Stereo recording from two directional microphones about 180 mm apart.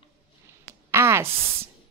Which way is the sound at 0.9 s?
15° right (ahead or behind).